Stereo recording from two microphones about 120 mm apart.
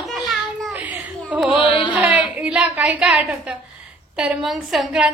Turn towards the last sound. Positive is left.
turn(degrees=-5)  # may be behind; listen again after turning